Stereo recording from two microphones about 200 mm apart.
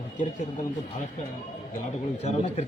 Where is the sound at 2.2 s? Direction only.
30° left (ahead or behind).